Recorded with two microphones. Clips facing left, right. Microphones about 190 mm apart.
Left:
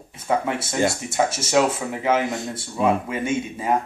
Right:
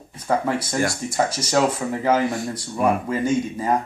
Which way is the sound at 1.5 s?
5° left (ahead or behind).